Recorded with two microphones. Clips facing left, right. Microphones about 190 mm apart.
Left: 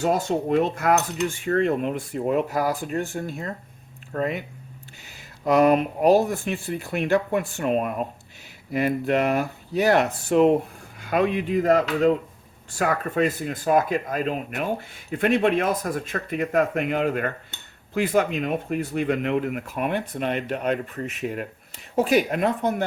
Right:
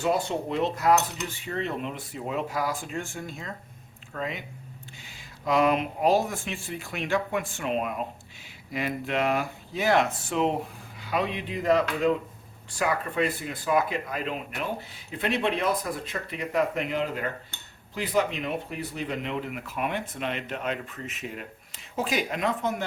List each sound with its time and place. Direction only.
0.0 s speech: 45° left (ahead or behind)
3.2 s speech: 55° left (ahead or behind)
5.5 s speech: 45° left (ahead or behind)
7.1 s speech: 40° left (ahead or behind); by 22.7 s 55° left (ahead or behind)